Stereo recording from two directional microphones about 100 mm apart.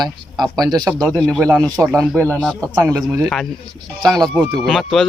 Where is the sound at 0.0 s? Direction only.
40° right (ahead or behind).